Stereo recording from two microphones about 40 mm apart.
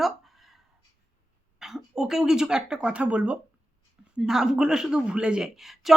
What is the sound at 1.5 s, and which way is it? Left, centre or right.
Speech, centre.